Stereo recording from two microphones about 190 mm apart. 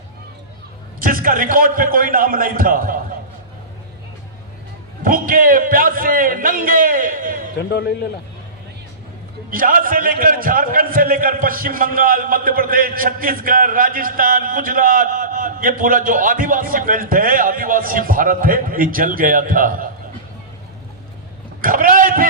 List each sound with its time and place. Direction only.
0.9 s a man's voice: 45° right (ahead or behind)
5.0 s a man's voice: 45° right (ahead or behind)
9.5 s a man's voice: 45° right (ahead or behind)
21.6 s a man's voice: 50° right (ahead or behind)